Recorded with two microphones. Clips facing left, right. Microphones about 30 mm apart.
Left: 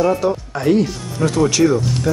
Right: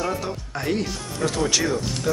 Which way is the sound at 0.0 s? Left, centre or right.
Centre.